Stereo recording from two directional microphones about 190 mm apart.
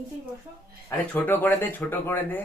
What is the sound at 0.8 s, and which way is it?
Speech, 10° left (ahead or behind).